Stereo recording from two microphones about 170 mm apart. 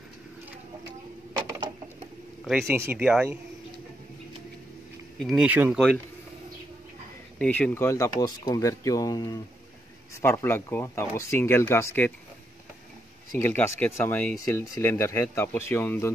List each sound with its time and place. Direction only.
2.6 s speech: 15° right (ahead or behind)
5.2 s speech: 5° right (ahead or behind)
7.3 s speech: 5° left (ahead or behind)
13.4 s speech: 15° left (ahead or behind)